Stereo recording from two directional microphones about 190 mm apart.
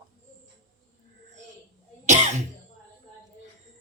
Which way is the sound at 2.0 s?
40° right (ahead or behind).